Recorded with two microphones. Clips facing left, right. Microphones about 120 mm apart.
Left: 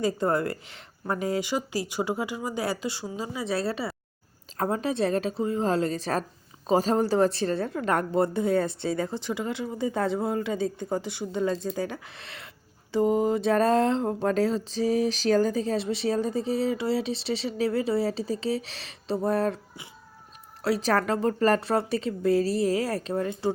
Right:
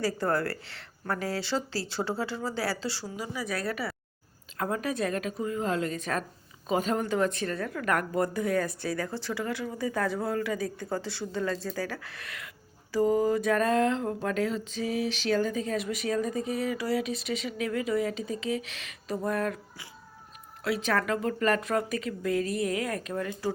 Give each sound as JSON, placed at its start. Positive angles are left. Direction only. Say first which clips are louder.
{"t": 0.0, "sound": "a woman's voice", "louder": "left 3 dB", "side_deg": 20}
{"t": 4.5, "sound": "mantra", "louder": "left 3 dB", "side_deg": 30}
{"t": 6.7, "sound": "a woman's voice", "louder": "left 5 dB", "side_deg": 35}
{"t": 12.9, "sound": "mantra", "louder": "left 1 dB", "side_deg": 20}